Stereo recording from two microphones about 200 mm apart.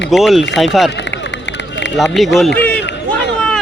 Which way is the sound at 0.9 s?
60° left (ahead or behind).